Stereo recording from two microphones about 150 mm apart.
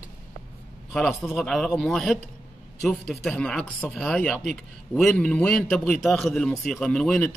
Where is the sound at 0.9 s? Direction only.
Centre (ahead or behind).